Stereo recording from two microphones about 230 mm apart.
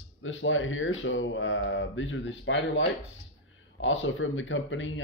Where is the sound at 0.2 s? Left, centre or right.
Left.